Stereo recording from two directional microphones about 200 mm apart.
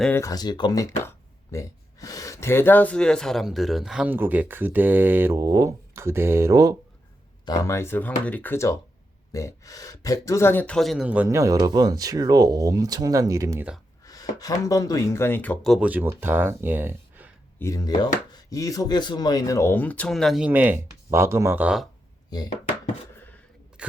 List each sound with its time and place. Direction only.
0.0 s speech: 10° left (ahead or behind); by 6.7 s 15° right (ahead or behind)
7.4 s speech: 15° left (ahead or behind); by 13.7 s 15° right (ahead or behind)
14.0 s speech: 15° left (ahead or behind); by 17.3 s 10° right (ahead or behind)
17.6 s speech: 15° left (ahead or behind); by 21.8 s 5° right (ahead or behind)
22.3 s speech: 20° left (ahead or behind)